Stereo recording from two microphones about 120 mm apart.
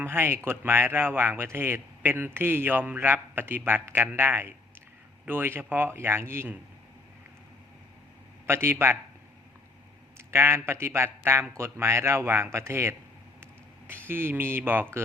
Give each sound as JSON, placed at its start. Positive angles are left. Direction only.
{"t": 0.0, "sound": "speech", "side_deg": -20}
{"t": 8.4, "sound": "speech", "side_deg": -20}
{"t": 10.2, "sound": "speech", "side_deg": -20}